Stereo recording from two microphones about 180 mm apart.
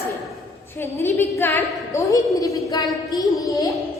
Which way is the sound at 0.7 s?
15° left (ahead or behind).